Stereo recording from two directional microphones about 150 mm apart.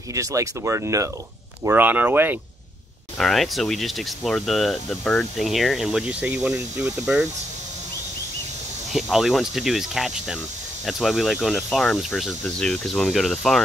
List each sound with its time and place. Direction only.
0.1 s speech: 20° right (ahead or behind)
3.2 s speech: centre (ahead or behind)
8.9 s speech: centre (ahead or behind)